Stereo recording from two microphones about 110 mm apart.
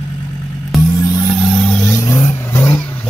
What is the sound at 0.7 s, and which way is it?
Music, centre (ahead or behind).